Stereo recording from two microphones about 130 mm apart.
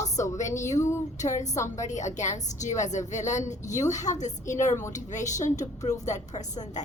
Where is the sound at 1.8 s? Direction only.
70° left (ahead or behind).